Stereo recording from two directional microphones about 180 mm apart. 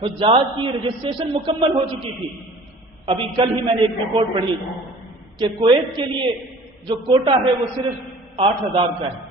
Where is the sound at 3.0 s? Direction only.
25° right (ahead or behind).